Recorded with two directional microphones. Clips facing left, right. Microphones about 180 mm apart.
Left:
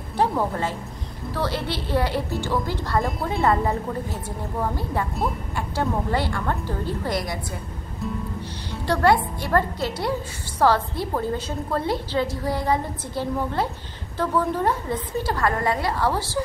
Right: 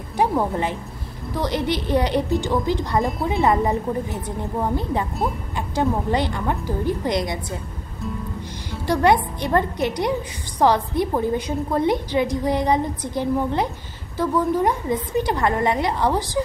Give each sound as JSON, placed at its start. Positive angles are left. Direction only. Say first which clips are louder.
{"t": 0.2, "sound": "a woman's voice", "louder": "right 2 dB", "side_deg": -15}
{"t": 3.0, "sound": "a woman's voice", "louder": "right 3 dB", "side_deg": 0}
{"t": 3.3, "sound": "a woman's voice", "louder": "right 2 dB", "side_deg": -15}
{"t": 8.8, "sound": "a woman's voice", "louder": "right 2 dB", "side_deg": -15}